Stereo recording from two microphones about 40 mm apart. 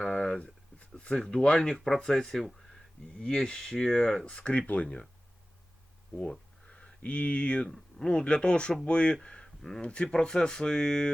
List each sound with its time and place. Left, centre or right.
0.2 s a sound: left
0.8 s speech: left
1.6 s speech: centre
4.0 s speech: centre
4.4 s speech: left
6.7 s speech: left
9.2 s a sound: left
9.6 s speech: centre
9.8 s speech: left